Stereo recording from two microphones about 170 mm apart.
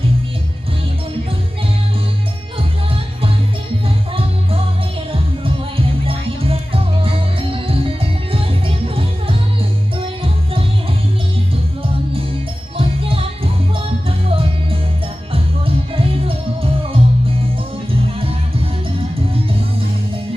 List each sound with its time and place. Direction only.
3.8 s music: 35° right (ahead or behind)
6.1 s music: 35° right (ahead or behind)
12.7 s music: 30° right (ahead or behind)